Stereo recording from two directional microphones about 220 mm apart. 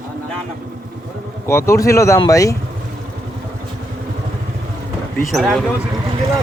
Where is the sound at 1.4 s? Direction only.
10° left (ahead or behind).